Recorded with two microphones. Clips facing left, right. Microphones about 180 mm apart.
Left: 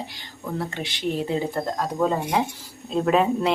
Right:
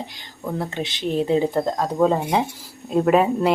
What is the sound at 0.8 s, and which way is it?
Speech, 20° right (ahead or behind).